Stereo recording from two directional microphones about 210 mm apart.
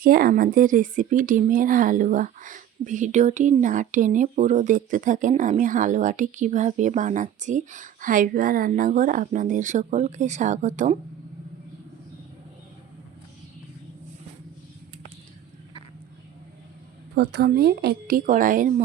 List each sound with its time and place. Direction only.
0.0 s speech: 45° right (ahead or behind)
17.2 s a woman's voice: 50° right (ahead or behind)